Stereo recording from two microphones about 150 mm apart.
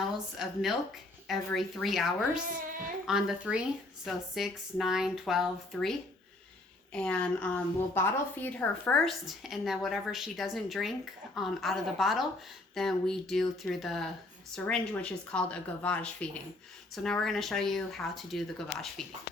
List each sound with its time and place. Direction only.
0.3 s a woman's voice: centre (ahead or behind)
2.5 s speech: 65° right (ahead or behind)
3.1 s a woman's voice: 5° right (ahead or behind)